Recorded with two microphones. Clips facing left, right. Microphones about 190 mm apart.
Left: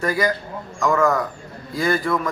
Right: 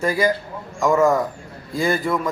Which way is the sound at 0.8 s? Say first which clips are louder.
Right 2 dB; 20° right (ahead or behind).